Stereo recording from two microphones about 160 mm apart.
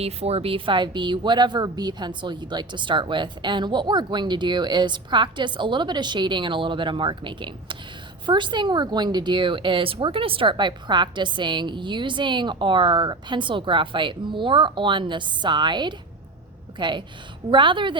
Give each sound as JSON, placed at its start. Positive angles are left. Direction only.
{"t": 0.0, "sound": "a woman's voice", "side_deg": -40}